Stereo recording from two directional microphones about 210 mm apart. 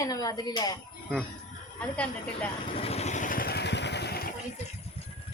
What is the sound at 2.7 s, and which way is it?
Vehicle, 30° left (ahead or behind).